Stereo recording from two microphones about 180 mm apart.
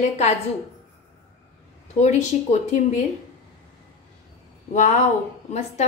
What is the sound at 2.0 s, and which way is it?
Speech, 40° left (ahead or behind).